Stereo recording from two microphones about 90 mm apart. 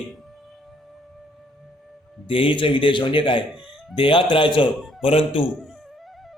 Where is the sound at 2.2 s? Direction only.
90° left; by 4.7 s 70° left (ahead or behind).